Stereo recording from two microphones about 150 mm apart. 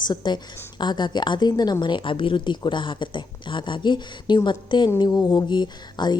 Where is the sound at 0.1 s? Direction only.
30° left (ahead or behind).